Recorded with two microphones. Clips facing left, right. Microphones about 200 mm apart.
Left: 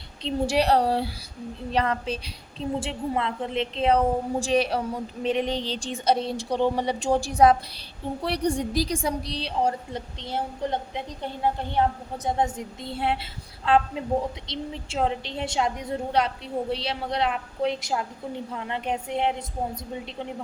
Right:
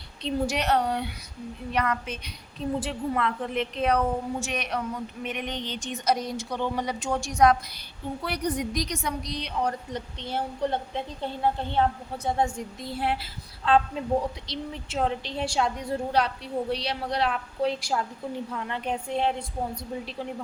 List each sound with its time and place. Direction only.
0.2 s a woman's voice: 25° left (ahead or behind)